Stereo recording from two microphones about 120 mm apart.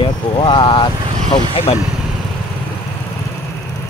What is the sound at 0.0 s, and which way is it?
Speech, 45° left (ahead or behind).